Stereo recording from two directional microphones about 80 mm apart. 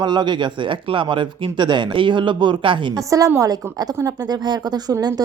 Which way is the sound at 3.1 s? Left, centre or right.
Right.